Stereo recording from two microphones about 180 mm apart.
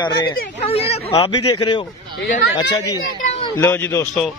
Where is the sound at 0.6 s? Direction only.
35° left (ahead or behind).